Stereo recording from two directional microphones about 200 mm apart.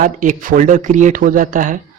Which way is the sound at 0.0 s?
40° right (ahead or behind).